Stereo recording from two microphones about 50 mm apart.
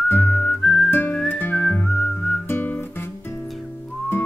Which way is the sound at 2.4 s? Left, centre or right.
Left.